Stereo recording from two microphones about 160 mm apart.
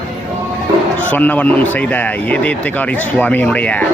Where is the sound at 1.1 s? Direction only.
10° left (ahead or behind).